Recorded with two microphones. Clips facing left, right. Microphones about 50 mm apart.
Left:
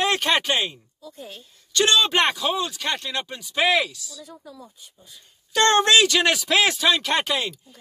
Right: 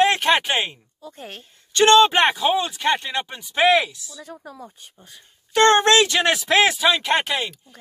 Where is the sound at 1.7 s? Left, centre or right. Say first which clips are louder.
Right 6 dB; right.